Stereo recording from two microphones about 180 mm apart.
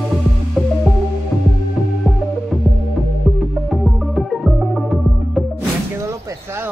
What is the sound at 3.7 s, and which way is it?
Music, centre (ahead or behind).